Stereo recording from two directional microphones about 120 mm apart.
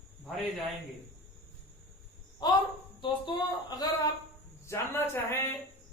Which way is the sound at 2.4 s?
40° left (ahead or behind).